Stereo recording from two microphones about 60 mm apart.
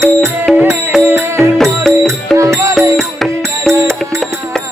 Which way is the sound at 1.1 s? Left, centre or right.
Right.